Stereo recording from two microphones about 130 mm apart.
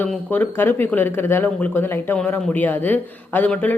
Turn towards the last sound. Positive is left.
turn(degrees=10)  # may be behind; listen again after turning